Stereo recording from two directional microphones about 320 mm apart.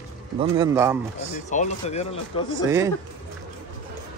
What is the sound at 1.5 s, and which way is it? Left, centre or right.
Speech, left.